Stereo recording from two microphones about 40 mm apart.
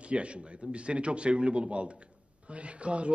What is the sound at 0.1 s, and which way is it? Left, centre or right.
A man's voice, right.